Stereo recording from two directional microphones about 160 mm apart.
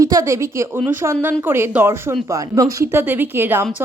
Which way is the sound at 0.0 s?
20° right (ahead or behind).